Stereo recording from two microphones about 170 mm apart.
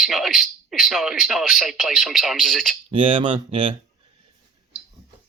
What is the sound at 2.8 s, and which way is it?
Speech, 30° right (ahead or behind).